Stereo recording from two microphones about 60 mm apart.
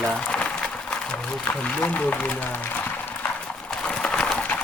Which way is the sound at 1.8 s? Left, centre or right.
Left.